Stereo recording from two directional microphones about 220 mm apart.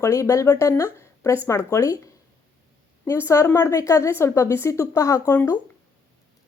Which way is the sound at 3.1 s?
10° left (ahead or behind).